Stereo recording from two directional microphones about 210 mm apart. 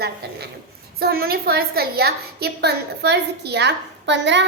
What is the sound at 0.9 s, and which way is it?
A woman's voice, 45° right (ahead or behind).